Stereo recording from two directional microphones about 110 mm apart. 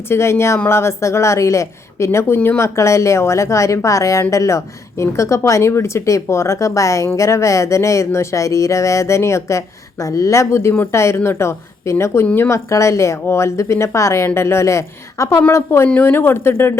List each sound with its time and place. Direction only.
0.1 s a woman's voice: 25° left (ahead or behind)